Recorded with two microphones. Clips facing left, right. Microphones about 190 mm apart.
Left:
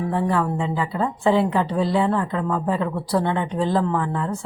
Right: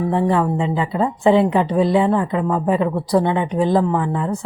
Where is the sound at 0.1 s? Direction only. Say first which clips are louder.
Right 4 dB; 20° right (ahead or behind).